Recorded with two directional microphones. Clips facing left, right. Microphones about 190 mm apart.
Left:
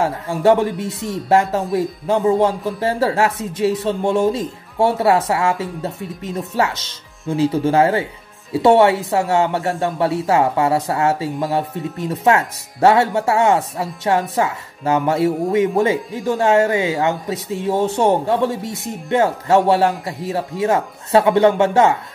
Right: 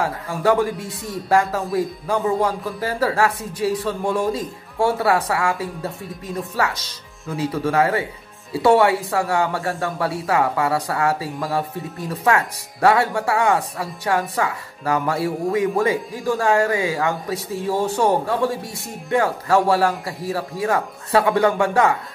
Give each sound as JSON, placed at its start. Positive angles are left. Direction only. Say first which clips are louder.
{"t": 0.0, "sound": "speech", "louder": "left 4 dB", "side_deg": 25}